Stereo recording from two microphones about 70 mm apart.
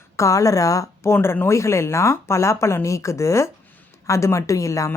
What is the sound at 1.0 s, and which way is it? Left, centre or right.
Speech, left.